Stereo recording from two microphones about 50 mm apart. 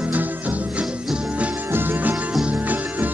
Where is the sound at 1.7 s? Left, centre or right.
Right.